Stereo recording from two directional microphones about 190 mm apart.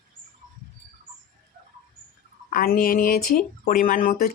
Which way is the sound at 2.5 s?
45° left (ahead or behind).